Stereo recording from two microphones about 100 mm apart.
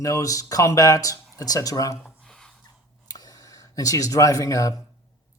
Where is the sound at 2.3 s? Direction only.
5° left (ahead or behind).